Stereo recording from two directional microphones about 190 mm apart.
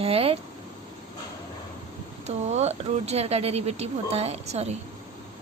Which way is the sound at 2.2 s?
35° right (ahead or behind).